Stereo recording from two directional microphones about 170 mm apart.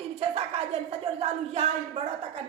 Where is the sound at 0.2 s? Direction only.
35° right (ahead or behind).